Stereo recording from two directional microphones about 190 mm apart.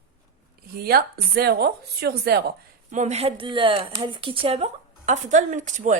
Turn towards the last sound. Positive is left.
turn(degrees=-40)  # may be behind; listen again after turning